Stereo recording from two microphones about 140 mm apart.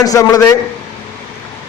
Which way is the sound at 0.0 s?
25° left (ahead or behind).